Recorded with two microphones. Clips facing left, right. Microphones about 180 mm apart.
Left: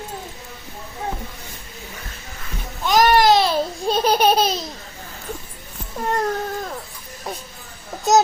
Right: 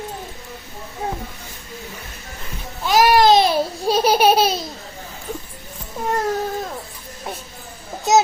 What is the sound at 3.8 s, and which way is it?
Laughter, 10° right (ahead or behind).